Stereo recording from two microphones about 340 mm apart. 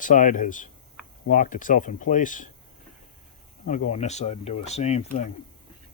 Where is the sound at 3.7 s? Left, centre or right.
Left.